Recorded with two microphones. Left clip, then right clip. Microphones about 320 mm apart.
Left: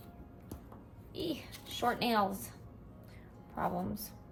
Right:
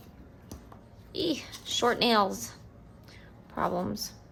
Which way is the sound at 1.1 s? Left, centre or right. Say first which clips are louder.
Right 8 dB; centre.